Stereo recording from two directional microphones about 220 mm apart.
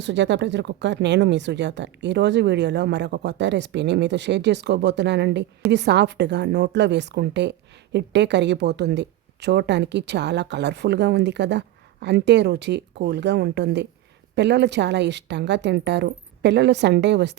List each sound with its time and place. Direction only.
0.0 s a woman's voice: 55° right (ahead or behind)